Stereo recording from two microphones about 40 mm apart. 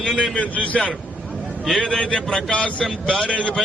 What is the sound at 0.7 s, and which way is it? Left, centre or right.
Speech, centre.